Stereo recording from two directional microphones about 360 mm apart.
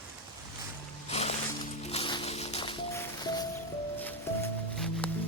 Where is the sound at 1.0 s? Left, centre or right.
Centre.